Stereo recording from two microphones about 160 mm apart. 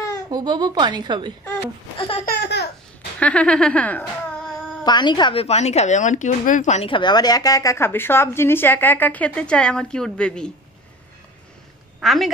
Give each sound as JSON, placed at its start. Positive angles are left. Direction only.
{"t": 0.3, "sound": "a woman's voice", "side_deg": -25}
{"t": 2.0, "sound": "speech", "side_deg": 35}
{"t": 2.2, "sound": "laughter", "side_deg": 90}
{"t": 3.2, "sound": "a woman's voice", "side_deg": 5}
{"t": 4.8, "sound": "speech", "side_deg": 30}
{"t": 6.9, "sound": "a woman's voice", "side_deg": 30}
{"t": 12.0, "sound": "speech", "side_deg": 0}